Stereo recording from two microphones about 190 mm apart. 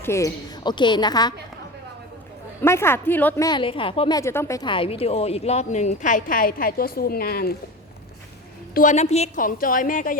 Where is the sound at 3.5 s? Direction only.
25° left (ahead or behind); by 7.6 s 55° left (ahead or behind).